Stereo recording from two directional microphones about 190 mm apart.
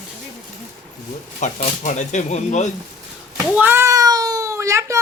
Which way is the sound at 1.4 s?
40° left (ahead or behind).